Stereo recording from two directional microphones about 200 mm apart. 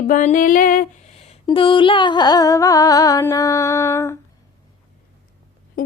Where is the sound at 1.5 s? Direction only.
25° left (ahead or behind).